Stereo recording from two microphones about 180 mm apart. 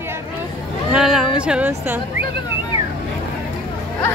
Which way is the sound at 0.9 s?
Centre (ahead or behind).